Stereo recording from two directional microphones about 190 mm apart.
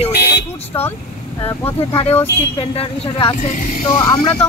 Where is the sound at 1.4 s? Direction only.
10° left (ahead or behind).